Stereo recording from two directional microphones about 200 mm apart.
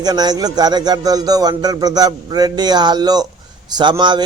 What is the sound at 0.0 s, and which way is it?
A man's voice, 20° right (ahead or behind).